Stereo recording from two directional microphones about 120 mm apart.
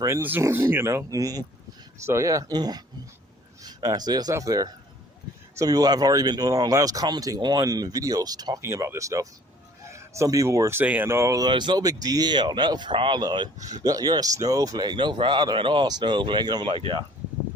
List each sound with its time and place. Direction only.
0.2 s speech: 15° right (ahead or behind)
11.4 s speech: 40° right (ahead or behind)